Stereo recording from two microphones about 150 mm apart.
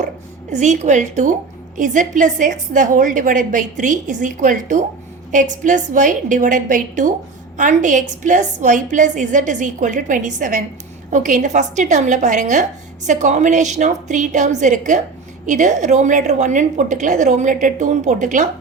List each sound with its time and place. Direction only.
0.5 s a woman's voice: 50° right (ahead or behind)